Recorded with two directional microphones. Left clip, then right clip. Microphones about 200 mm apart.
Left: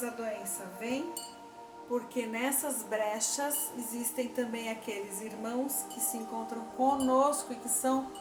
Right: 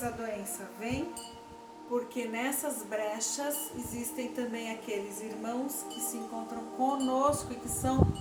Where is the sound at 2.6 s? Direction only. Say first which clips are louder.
Right 1 dB; 15° left (ahead or behind).